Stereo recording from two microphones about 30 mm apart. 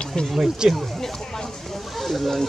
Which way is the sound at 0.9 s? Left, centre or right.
Centre.